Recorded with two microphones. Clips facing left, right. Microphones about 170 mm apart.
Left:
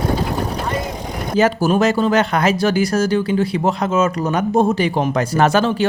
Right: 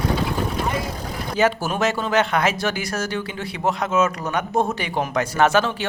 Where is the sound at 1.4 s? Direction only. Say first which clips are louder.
Left 5 dB; 35° left (ahead or behind).